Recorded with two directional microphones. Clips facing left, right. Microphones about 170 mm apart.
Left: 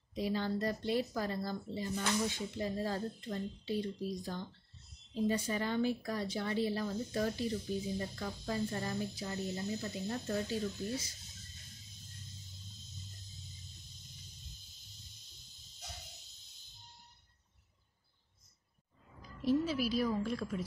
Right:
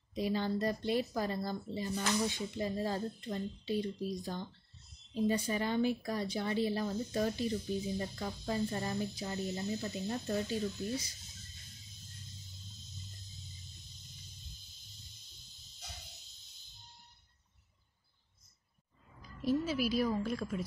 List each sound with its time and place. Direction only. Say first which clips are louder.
0.1 s speech: right 1 dB; 15° right (ahead or behind)
19.4 s speech: even; 5° right (ahead or behind)